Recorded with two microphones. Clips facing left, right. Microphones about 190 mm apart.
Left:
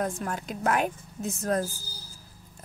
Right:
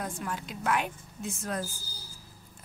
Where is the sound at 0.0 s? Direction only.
45° left (ahead or behind).